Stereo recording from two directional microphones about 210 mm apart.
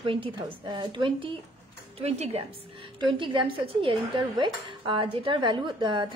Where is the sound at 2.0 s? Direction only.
30° right (ahead or behind).